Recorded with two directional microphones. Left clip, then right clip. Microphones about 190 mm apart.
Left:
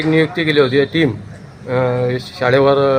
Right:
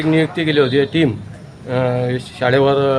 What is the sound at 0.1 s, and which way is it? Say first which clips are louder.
A man's voice: left 2 dB; 10° right (ahead or behind).